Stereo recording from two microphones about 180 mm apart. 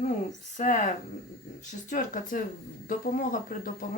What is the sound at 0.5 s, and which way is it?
Speech, 45° left (ahead or behind).